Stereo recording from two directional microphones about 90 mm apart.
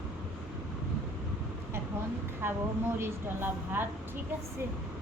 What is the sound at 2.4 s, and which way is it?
A woman's voice, 25° right (ahead or behind).